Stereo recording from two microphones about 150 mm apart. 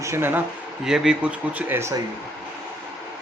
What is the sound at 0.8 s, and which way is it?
Speech, 5° right (ahead or behind).